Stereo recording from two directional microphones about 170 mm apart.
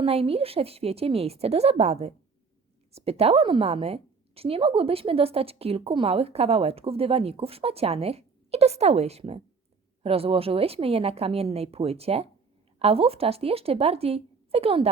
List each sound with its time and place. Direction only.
0.0 s a woman's voice: 35° right (ahead or behind)